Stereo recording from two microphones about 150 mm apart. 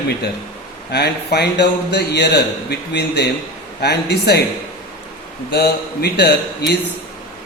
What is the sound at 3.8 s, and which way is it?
Speech, 90° left.